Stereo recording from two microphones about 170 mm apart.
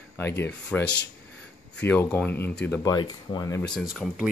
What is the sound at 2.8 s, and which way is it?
Speech, 25° left (ahead or behind).